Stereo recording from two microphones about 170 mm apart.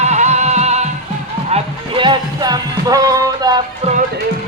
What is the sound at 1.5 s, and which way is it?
Music, 30° right (ahead or behind).